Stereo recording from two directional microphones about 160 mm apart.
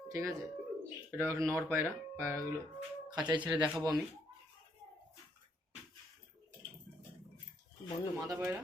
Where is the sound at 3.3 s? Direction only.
30° right (ahead or behind).